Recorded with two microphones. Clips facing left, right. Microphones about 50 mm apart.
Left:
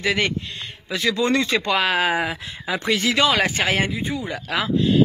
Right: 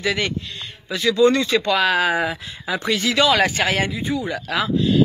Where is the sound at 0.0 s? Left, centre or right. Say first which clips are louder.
Left 1 dB; left.